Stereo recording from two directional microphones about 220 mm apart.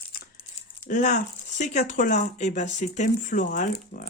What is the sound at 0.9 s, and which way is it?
Speech, 35° left (ahead or behind).